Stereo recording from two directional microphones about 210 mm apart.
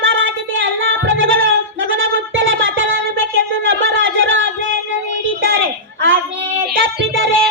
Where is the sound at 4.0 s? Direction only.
65° right (ahead or behind).